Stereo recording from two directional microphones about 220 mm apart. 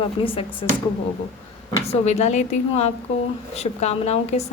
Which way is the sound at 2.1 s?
30° left (ahead or behind).